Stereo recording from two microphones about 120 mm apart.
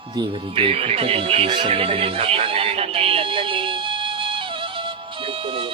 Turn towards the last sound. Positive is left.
turn(degrees=-50)  # may be behind; listen again after turning